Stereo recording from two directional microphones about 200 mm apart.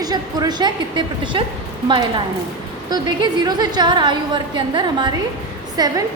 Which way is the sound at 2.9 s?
20° right (ahead or behind).